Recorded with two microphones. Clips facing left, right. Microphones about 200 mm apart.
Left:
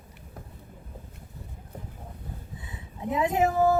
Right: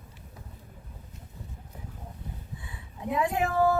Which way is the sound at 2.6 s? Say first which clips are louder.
Left 4 dB; 20° left (ahead or behind).